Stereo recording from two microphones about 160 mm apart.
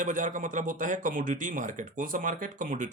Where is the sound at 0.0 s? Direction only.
55° right (ahead or behind).